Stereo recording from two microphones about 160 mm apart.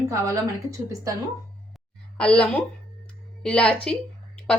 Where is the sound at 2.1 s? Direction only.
5° left (ahead or behind).